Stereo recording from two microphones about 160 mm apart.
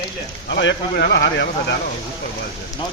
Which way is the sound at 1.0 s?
90° left.